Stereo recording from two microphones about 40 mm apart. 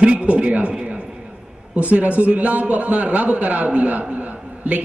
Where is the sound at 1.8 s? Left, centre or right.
Right.